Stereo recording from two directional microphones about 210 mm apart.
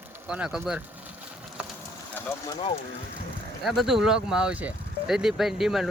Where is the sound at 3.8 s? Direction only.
Centre (ahead or behind).